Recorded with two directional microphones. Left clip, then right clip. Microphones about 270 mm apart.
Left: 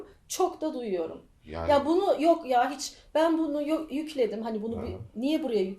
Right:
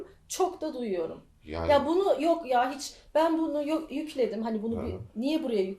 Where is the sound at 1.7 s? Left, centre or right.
Left.